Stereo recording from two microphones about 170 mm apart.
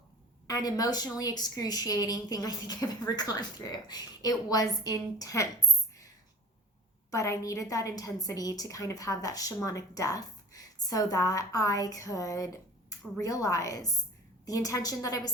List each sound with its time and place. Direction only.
0.4 s a woman's voice: 20° left (ahead or behind)
7.1 s a woman's voice: 20° left (ahead or behind)